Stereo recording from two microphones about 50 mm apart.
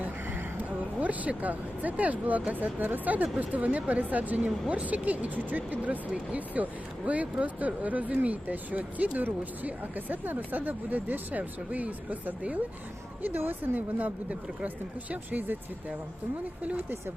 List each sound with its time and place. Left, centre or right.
0.5 s speech: right
13.2 s speech: right